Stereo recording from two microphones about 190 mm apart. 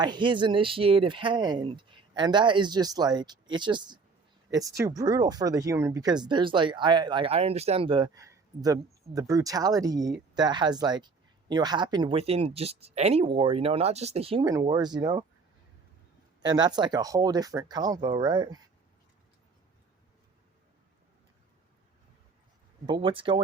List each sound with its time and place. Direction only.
0.0 s speech: 25° right (ahead or behind)
16.4 s speech: 20° right (ahead or behind)
22.9 s speech: 25° right (ahead or behind)